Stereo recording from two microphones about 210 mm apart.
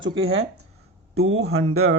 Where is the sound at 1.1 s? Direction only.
85° right.